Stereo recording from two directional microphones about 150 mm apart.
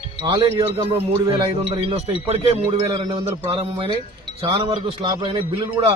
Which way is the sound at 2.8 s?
30° right (ahead or behind).